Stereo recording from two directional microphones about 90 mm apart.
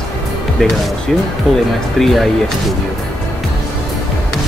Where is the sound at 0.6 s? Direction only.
5° left (ahead or behind).